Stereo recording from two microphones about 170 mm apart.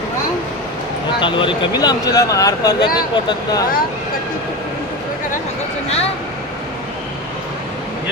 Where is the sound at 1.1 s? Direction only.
30° left (ahead or behind).